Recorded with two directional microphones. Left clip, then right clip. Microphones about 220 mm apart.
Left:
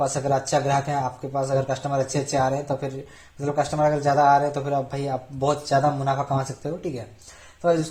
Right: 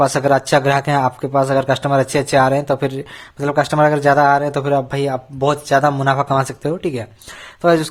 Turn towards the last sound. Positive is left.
turn(degrees=-35)  # may be behind; listen again after turning